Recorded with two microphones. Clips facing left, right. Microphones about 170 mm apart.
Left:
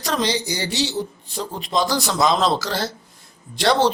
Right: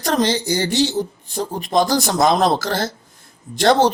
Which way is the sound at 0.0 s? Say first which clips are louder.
Right 4 dB; 50° right (ahead or behind).